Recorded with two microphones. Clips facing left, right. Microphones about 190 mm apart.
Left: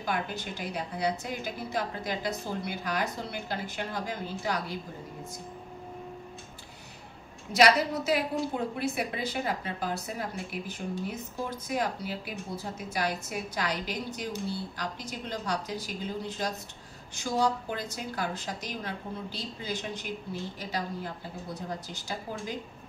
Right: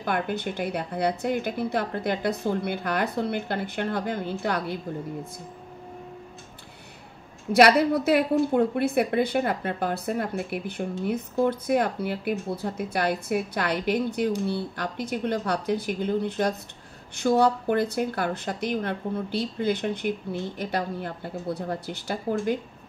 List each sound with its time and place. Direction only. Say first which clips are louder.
0.0 s a woman's voice: right 6 dB; 60° right (ahead or behind)
7.5 s a woman's voice: right 6 dB; 60° right (ahead or behind)